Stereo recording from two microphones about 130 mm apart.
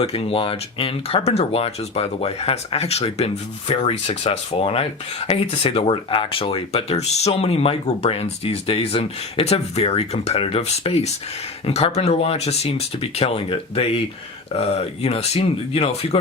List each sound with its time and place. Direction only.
0.0 s speech: 50° left (ahead or behind)
15.0 s speech: 55° left (ahead or behind)